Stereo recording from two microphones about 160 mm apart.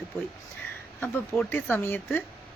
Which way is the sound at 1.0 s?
10° left (ahead or behind).